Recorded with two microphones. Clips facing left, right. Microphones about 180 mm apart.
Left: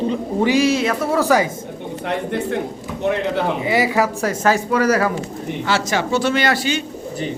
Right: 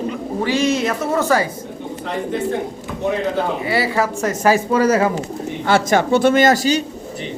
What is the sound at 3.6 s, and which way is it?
Speech, 15° left (ahead or behind).